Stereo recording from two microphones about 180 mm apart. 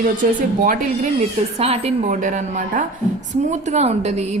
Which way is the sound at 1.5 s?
35° right (ahead or behind).